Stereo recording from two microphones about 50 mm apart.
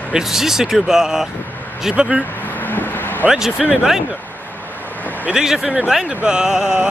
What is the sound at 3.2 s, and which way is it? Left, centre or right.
Speech, centre.